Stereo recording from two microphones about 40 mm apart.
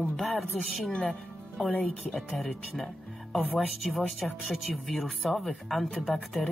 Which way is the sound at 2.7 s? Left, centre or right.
Centre.